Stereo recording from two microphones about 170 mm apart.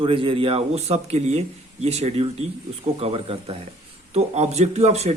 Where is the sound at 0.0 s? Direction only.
30° right (ahead or behind).